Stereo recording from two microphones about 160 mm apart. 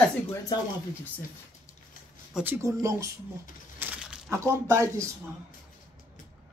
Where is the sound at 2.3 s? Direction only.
15° right (ahead or behind).